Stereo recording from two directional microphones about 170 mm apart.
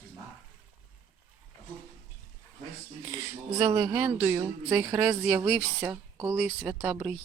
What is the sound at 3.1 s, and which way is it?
Speech, 20° right (ahead or behind).